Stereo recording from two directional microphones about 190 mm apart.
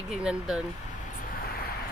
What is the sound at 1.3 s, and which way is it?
Vehicle, 50° left (ahead or behind).